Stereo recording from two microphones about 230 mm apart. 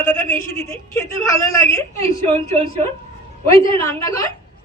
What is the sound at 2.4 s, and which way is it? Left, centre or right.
Speech, right.